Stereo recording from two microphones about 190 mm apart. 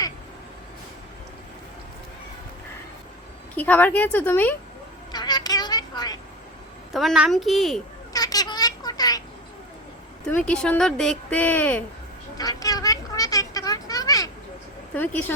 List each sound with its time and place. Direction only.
3.5 s speech: 10° left (ahead or behind)
5.1 s a sound: 20° left (ahead or behind)
6.9 s speech: centre (ahead or behind)
8.1 s a sound: 20° left (ahead or behind)
10.2 s speech: 5° left (ahead or behind)
12.4 s children playing: 20° left (ahead or behind)
14.9 s speech: 10° left (ahead or behind)